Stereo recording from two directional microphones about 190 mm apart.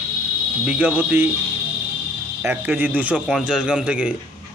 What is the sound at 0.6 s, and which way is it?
Speech, 5° right (ahead or behind).